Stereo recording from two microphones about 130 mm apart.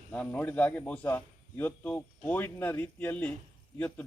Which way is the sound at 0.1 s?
10° left (ahead or behind).